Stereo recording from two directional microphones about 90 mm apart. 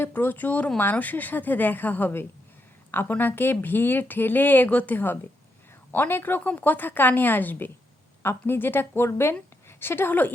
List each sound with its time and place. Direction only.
0.0 s speech: 25° left (ahead or behind)